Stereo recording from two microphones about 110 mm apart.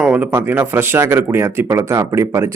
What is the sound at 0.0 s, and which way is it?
Speech, 15° right (ahead or behind).